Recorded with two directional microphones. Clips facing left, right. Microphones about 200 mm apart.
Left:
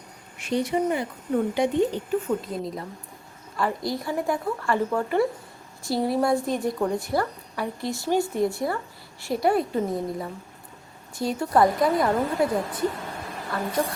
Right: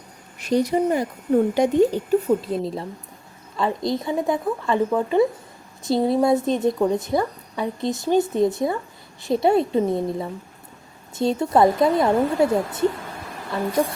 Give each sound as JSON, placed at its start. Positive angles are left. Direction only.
{"t": 0.3, "sound": "a woman's voice", "side_deg": -40}